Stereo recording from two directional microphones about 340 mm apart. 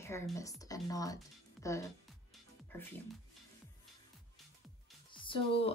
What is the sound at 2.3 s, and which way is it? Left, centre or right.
Music, centre.